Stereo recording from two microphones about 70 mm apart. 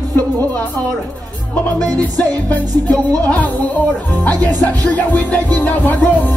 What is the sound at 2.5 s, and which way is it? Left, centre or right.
Speech, left.